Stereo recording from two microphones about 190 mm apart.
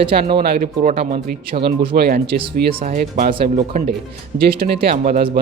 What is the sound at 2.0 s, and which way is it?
Speech, 60° right (ahead or behind).